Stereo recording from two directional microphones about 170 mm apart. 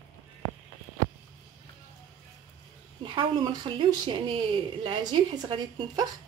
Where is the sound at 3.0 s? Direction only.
30° right (ahead or behind).